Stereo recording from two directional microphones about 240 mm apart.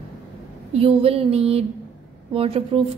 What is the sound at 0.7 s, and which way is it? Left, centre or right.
Speech, right.